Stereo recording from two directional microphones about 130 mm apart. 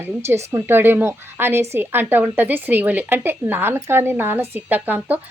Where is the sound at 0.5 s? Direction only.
15° right (ahead or behind).